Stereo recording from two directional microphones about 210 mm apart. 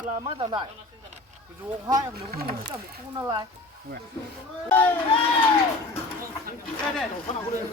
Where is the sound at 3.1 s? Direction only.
20° right (ahead or behind).